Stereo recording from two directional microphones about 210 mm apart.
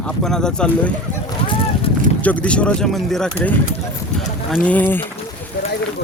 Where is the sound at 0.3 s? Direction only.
5° left (ahead or behind).